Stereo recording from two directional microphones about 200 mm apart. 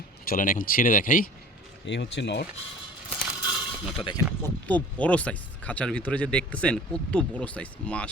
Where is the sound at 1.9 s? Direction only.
60° left (ahead or behind).